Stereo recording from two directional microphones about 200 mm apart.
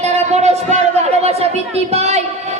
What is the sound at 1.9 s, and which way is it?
Speech, 35° right (ahead or behind).